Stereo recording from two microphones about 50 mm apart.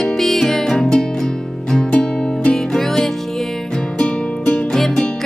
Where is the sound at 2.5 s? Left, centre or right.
Centre.